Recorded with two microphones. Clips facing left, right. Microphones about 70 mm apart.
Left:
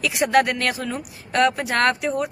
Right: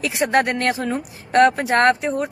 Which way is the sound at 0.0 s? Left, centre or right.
Right.